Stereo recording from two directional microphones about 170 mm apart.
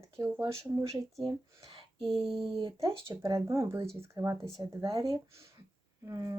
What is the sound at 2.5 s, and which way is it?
Speech, 30° right (ahead or behind).